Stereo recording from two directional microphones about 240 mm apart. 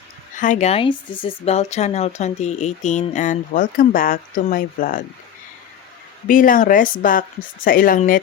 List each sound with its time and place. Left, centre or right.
0.3 s speech: left
6.2 s speech: left